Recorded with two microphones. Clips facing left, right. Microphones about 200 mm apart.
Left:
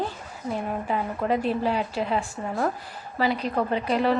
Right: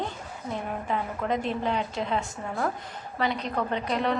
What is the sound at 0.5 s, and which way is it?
A woman's voice, 5° left (ahead or behind).